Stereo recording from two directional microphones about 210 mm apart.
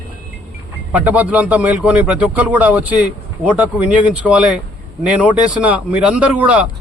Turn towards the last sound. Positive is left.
turn(degrees=-5)  # may be behind; listen again after turning